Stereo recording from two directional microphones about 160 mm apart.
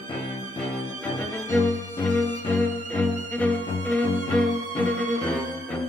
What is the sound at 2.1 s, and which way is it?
Music, 10° left (ahead or behind).